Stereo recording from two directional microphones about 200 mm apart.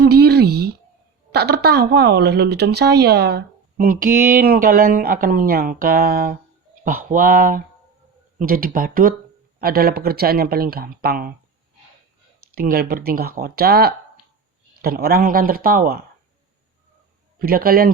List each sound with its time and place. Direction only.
0.0 s a sound: 55° right (ahead or behind)
1.3 s a woman's voice: 55° right (ahead or behind)
12.5 s a woman's voice: 50° right (ahead or behind)
17.3 s a woman's voice: 45° right (ahead or behind)